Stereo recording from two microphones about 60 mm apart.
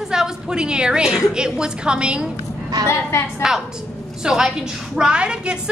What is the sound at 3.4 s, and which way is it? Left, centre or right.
A woman's voice, centre.